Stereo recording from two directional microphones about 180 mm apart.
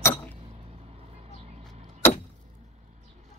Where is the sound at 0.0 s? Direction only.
15° left (ahead or behind).